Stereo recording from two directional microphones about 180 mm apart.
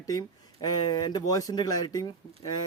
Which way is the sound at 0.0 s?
20° left (ahead or behind).